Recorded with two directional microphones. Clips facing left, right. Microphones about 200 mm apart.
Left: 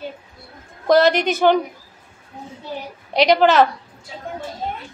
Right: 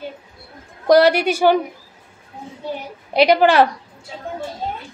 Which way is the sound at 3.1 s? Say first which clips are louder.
Right 1 dB; 10° right (ahead or behind).